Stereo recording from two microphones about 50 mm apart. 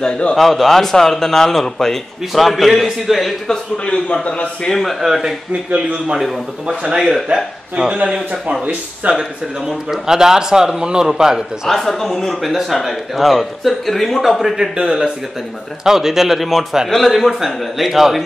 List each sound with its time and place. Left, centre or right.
0.0 s a man's voice: centre
0.4 s speech: centre
3.4 s a man's voice: left
4.6 s speech: centre
5.0 s a man's voice: centre
5.5 s a man's voice: right
6.1 s speech: centre
8.1 s a man's voice: right
9.7 s a man's voice: centre
11.6 s speech: centre
14.8 s a man's voice: centre